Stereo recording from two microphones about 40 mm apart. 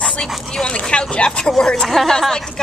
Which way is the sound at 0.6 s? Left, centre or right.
Left.